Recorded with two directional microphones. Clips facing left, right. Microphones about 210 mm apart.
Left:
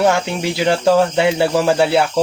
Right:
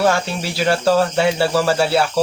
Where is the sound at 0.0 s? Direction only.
20° left (ahead or behind).